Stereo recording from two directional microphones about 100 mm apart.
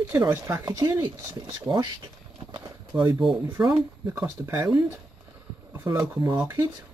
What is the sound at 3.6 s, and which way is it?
Speech, 10° right (ahead or behind).